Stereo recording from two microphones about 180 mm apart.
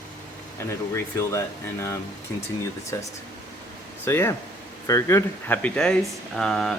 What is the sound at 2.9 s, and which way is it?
Speech, 20° left (ahead or behind).